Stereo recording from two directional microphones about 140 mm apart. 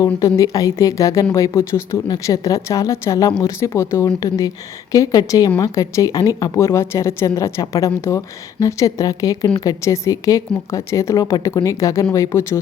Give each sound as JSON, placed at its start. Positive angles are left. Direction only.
{"t": 0.0, "sound": "speech", "side_deg": 25}